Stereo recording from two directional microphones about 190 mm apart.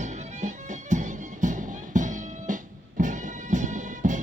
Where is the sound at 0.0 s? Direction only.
40° right (ahead or behind).